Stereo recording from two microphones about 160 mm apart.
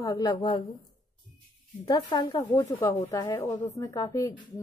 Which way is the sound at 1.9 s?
25° left (ahead or behind).